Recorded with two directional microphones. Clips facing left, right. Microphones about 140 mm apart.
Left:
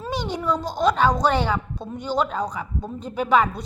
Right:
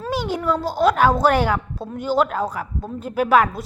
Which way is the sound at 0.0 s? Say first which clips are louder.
Right 3 dB; 5° right (ahead or behind).